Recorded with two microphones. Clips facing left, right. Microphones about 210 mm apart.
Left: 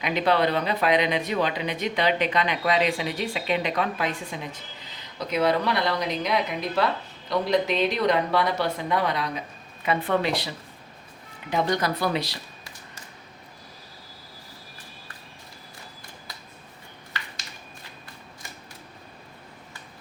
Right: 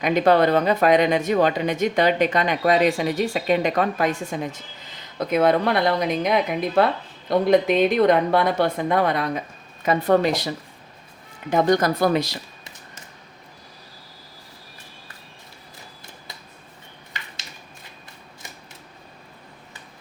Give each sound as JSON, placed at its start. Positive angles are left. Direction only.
{"t": 0.0, "sound": "speech", "side_deg": -45}
{"t": 11.7, "sound": "speech", "side_deg": -45}